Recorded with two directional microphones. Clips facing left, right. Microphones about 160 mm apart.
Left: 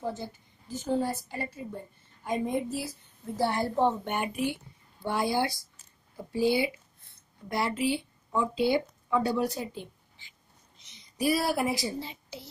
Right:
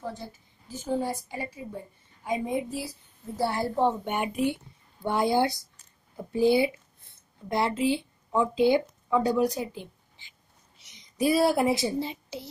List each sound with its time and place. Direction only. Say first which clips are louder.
0.1 s a woman's voice: left 2 dB; centre (ahead or behind); by 12.4 s 20° right (ahead or behind)